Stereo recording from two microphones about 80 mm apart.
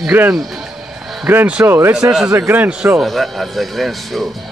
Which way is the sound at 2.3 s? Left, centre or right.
Right.